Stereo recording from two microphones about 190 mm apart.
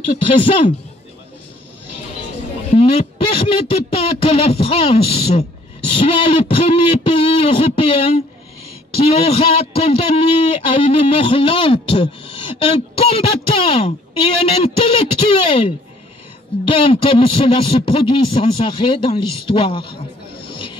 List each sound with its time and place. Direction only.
2.7 s a man's voice: 30° left (ahead or behind)